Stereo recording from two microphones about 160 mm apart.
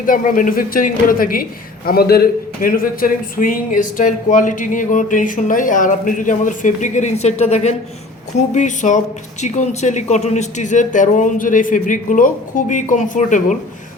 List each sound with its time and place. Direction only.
0.0 s speech: 60° left (ahead or behind)